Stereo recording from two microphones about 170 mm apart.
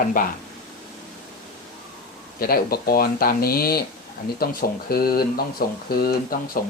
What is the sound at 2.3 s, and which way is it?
Speech, 60° left (ahead or behind).